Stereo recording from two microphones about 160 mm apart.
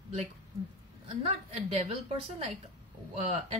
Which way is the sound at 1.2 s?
40° right (ahead or behind).